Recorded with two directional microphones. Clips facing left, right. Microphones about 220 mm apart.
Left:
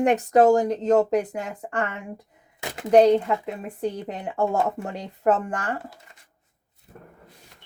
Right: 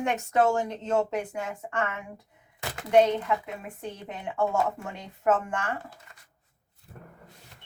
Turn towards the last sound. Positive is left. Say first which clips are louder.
# left 3 dB
turn(degrees=35)  # may be behind; listen again after turning